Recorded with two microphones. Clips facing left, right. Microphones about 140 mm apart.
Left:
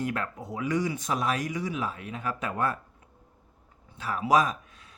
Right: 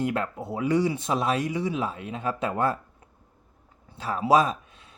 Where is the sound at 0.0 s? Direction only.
25° right (ahead or behind).